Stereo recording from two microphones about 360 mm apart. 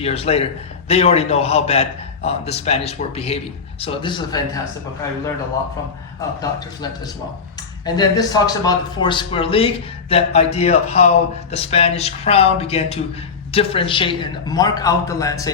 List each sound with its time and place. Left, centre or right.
0.0 s speech: centre
6.4 s speech: centre